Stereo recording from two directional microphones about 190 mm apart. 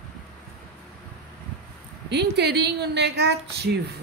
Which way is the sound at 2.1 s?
60° right (ahead or behind).